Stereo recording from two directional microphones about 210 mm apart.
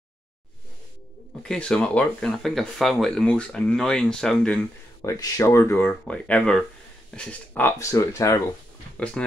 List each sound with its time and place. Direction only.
1.4 s speech: 5° left (ahead or behind)
5.0 s speech: 15° left (ahead or behind)